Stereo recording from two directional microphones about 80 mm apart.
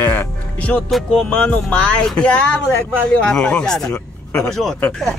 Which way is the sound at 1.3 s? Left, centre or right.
Centre.